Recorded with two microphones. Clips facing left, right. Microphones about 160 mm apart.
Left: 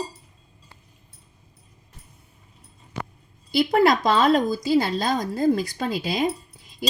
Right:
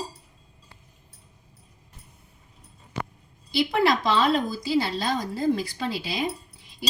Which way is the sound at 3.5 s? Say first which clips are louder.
Left 4 dB; 45° left (ahead or behind).